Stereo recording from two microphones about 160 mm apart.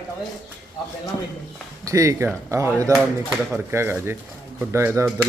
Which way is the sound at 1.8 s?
20° right (ahead or behind).